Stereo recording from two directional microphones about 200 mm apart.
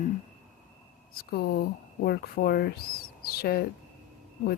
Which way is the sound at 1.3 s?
55° left (ahead or behind).